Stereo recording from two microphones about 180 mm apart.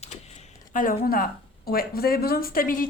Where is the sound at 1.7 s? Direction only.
55° left (ahead or behind).